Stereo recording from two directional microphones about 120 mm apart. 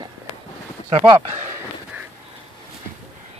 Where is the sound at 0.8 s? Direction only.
50° right (ahead or behind).